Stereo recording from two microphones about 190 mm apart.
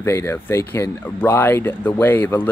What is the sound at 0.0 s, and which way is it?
Speech, 15° left (ahead or behind).